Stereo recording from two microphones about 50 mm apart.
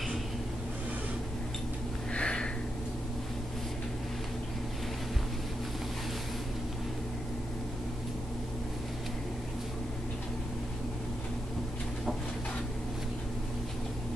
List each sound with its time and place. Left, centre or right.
2.1 s sniff: centre